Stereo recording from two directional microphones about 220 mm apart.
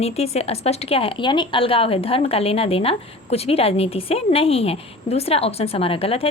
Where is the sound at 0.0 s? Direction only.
30° left (ahead or behind).